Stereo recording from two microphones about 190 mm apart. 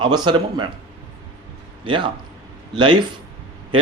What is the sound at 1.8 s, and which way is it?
Speech, 25° right (ahead or behind).